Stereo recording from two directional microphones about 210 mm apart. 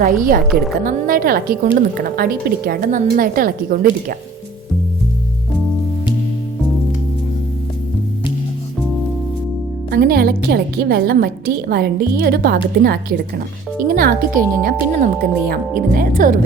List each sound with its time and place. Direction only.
0.0 s a woman's voice: 40° right (ahead or behind)
9.9 s a woman's voice: 45° right (ahead or behind)